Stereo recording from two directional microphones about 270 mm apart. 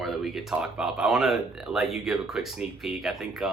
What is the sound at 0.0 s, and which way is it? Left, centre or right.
Speech, centre.